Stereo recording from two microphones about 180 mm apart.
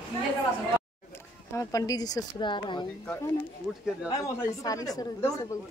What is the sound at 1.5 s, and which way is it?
A woman's voice, 20° left (ahead or behind).